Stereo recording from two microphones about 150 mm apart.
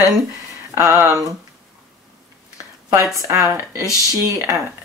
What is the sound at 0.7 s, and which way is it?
Speech, 15° right (ahead or behind).